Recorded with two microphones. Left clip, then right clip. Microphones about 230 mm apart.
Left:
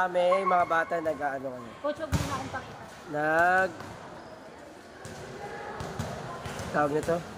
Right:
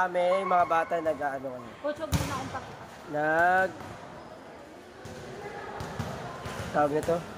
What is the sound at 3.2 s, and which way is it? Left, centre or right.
Speech, centre.